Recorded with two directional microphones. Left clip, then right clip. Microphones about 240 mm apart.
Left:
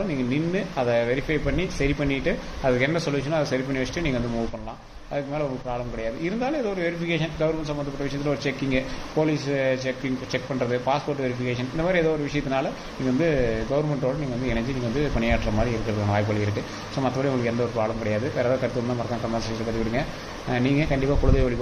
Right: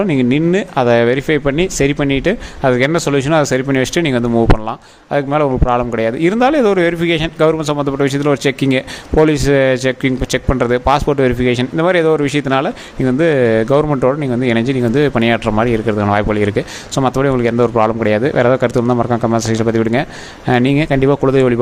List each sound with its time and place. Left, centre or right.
0.1 s speech: right
20.5 s speech: right